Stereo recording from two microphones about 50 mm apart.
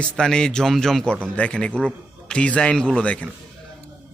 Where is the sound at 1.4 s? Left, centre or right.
Left.